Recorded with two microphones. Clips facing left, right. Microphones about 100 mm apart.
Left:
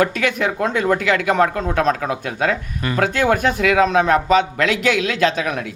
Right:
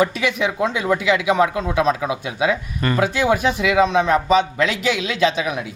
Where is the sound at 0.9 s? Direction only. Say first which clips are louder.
Right 1 dB; 50° left (ahead or behind).